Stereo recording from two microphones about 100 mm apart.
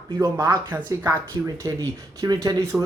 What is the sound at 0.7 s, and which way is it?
Speech, 20° right (ahead or behind).